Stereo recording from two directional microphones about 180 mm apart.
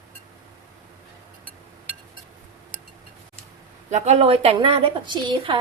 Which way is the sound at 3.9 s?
40° right (ahead or behind).